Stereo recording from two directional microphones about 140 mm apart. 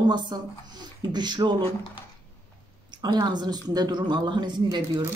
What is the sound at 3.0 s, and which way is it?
A woman's voice, 30° right (ahead or behind).